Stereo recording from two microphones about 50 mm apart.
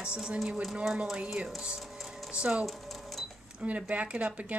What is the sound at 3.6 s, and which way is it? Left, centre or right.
Speech, right.